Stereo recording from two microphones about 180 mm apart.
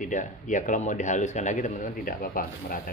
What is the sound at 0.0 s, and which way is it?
A man's voice, 45° left (ahead or behind).